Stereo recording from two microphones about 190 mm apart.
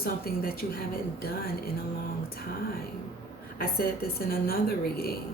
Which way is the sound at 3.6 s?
50° left (ahead or behind).